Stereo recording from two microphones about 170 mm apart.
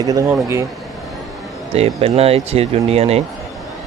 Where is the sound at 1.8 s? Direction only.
35° right (ahead or behind).